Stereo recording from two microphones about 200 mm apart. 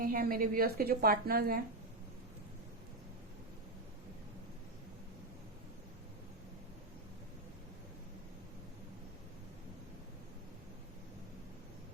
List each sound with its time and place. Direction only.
0.0 s a woman's voice: 45° right (ahead or behind)